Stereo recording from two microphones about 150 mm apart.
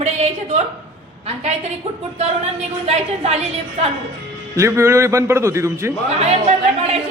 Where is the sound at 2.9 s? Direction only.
45° right (ahead or behind).